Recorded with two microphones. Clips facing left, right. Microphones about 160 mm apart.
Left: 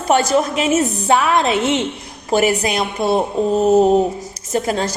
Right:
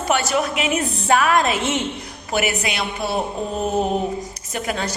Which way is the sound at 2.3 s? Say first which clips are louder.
Left 7 dB; 35° left (ahead or behind).